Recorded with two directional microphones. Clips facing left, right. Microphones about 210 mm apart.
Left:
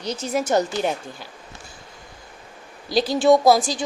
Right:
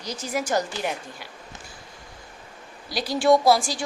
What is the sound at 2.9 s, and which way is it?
Speech, 25° left (ahead or behind).